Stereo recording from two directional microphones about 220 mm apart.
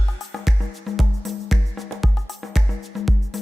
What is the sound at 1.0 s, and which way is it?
Music, centre (ahead or behind).